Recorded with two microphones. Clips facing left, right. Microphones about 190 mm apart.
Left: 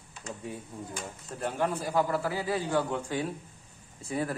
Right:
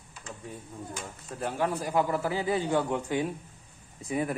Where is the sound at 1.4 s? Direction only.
5° right (ahead or behind).